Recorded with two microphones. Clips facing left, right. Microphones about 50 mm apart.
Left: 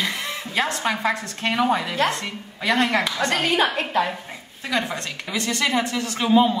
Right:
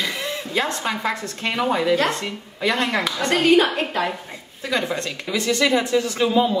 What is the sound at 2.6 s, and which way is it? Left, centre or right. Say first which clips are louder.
Speech: left 1 dB; left.